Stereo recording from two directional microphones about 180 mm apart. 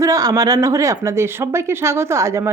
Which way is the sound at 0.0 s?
20° right (ahead or behind).